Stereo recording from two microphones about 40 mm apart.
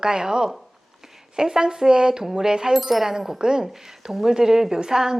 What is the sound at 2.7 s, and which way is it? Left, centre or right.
A woman's voice, centre.